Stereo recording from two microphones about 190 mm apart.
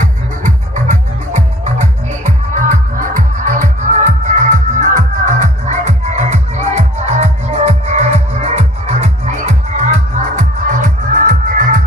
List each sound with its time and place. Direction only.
0.0 s music: 40° right (ahead or behind)